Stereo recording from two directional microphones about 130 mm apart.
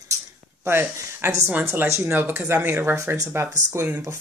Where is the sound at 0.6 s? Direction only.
20° right (ahead or behind).